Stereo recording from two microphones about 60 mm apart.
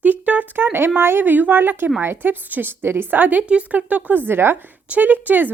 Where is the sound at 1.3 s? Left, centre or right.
Right.